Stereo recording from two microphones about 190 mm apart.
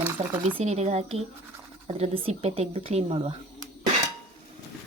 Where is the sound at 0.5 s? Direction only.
35° right (ahead or behind).